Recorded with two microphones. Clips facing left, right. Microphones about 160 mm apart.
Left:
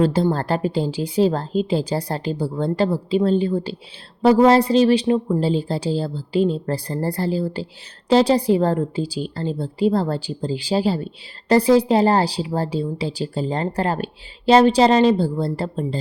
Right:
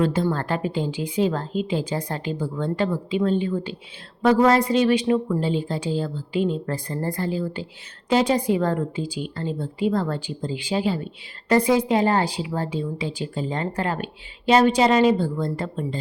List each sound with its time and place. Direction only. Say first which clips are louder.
0.0 s speech: left 4 dB; 35° left (ahead or behind)